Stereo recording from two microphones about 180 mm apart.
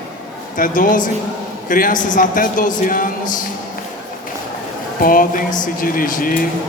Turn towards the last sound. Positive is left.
turn(degrees=50)  # may be behind; listen again after turning